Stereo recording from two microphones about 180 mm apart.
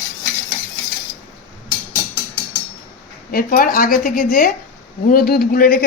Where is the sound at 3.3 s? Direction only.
50° left (ahead or behind).